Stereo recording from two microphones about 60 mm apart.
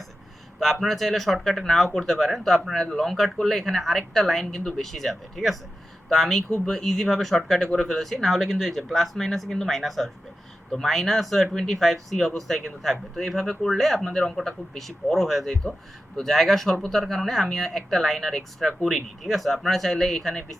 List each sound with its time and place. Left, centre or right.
0.6 s speech: centre